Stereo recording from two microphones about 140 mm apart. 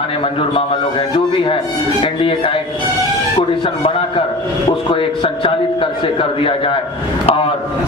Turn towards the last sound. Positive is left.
turn(degrees=45)  # may be behind; listen again after turning